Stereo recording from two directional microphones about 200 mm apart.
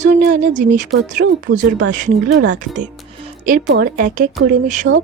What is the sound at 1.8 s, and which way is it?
Speech, 40° right (ahead or behind).